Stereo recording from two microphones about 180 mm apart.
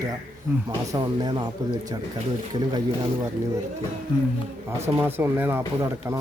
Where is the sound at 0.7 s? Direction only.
20° right (ahead or behind).